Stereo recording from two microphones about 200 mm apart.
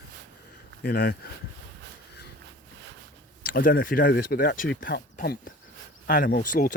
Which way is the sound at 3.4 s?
45° left (ahead or behind).